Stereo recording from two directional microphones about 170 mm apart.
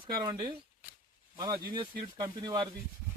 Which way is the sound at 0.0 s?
25° right (ahead or behind).